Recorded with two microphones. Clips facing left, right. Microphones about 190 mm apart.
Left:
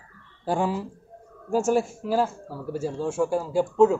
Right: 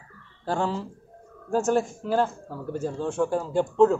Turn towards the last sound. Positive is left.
turn(degrees=5)  # may be behind; listen again after turning